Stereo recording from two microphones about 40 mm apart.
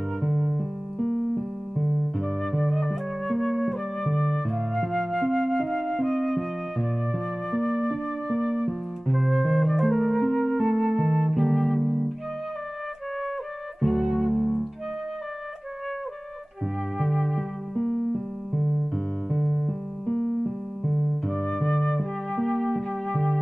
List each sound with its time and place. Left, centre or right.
0.3 s music: centre
0.9 s music: left
1.8 s music: centre
2.8 s flute: centre
9.0 s music: centre
10.6 s music: centre
13.7 s music: centre
17.0 s music: centre
17.7 s keyboard: left
19.3 s music: centre
20.1 s music: left
20.4 s flute: centre